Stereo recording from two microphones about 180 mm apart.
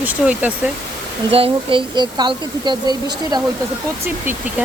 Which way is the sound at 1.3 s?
30° right (ahead or behind).